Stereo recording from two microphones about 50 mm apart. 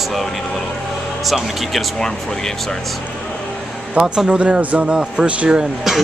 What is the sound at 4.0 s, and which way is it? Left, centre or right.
Speech, centre.